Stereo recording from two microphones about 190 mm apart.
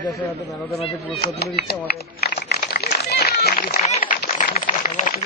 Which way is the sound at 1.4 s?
55° left (ahead or behind).